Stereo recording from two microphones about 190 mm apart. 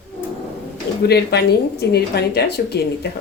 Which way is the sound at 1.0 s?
60° left (ahead or behind).